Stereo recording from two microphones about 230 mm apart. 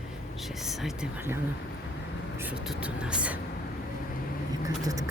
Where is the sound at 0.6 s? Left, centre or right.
Centre.